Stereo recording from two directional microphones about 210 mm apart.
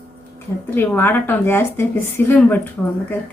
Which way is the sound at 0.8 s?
10° left (ahead or behind).